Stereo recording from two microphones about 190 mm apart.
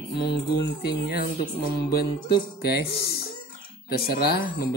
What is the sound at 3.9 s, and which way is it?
Speech, 55° left (ahead or behind).